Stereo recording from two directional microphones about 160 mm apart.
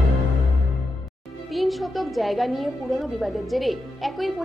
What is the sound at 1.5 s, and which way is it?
A woman's voice, centre (ahead or behind).